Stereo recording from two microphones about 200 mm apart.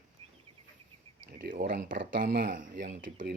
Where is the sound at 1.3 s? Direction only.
45° right (ahead or behind).